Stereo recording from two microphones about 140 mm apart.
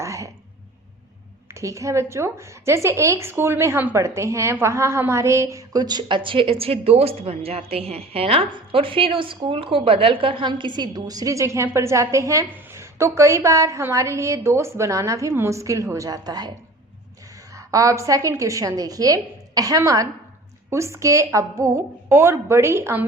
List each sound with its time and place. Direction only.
0.0 s a sound: 20° right (ahead or behind)
1.5 s a woman's voice: 20° right (ahead or behind)
17.5 s a woman's voice: 25° right (ahead or behind)